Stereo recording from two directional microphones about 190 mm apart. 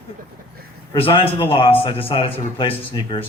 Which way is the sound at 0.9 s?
30° left (ahead or behind).